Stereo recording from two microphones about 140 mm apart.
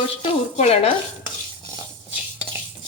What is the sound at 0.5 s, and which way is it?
Speech, 50° left (ahead or behind).